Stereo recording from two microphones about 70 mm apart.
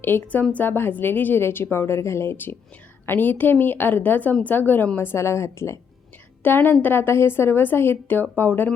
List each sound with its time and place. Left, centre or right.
0.0 s a woman's voice: left
4.9 s a woman's voice: left
6.4 s a woman's voice: left